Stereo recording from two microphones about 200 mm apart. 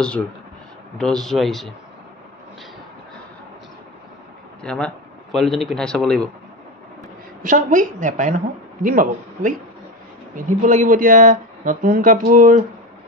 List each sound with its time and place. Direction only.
0.9 s speech: 5° left (ahead or behind)
4.6 s speech: 5° left (ahead or behind)
7.4 s a man's voice: 40° right (ahead or behind)